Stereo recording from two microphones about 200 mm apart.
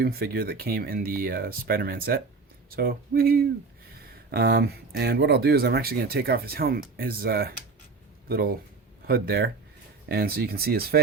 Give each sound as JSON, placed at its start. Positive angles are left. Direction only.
{"t": 0.0, "sound": "speech", "side_deg": -50}
{"t": 9.0, "sound": "speech", "side_deg": -50}